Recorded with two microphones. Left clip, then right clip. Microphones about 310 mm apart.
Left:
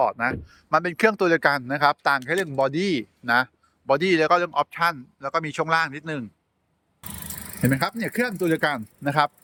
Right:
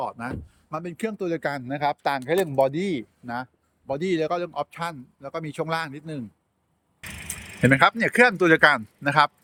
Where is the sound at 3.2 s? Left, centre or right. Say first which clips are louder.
Left 13 dB; left.